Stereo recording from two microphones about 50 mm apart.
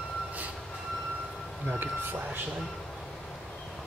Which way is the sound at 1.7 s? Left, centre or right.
Right.